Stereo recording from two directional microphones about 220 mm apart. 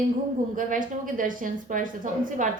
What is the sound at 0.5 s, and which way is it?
A woman's voice, 35° right (ahead or behind).